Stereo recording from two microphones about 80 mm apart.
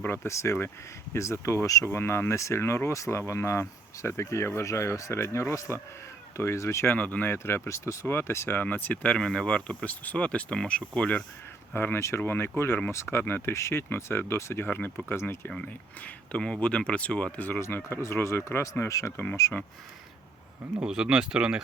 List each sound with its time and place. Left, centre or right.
0.0 s speech: left
6.8 s speech: centre
7.3 s speech: left
8.6 s speech: left
11.7 s speech: left
15.4 s speech: centre; by 19.2 s left
20.8 s speech: centre